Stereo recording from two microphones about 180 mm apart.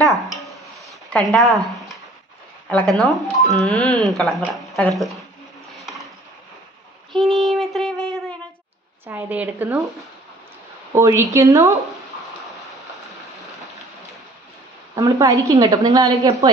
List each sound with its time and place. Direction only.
0.1 s a sound: centre (ahead or behind)
2.7 s speech: 5° left (ahead or behind)
5.8 s a sound: centre (ahead or behind)
7.1 s child singing: centre (ahead or behind)
9.0 s speech: 10° right (ahead or behind)
11.0 s speech: 15° right (ahead or behind)
15.0 s a woman's voice: 20° right (ahead or behind)